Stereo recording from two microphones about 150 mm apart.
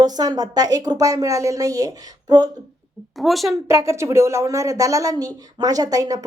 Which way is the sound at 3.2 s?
Centre (ahead or behind).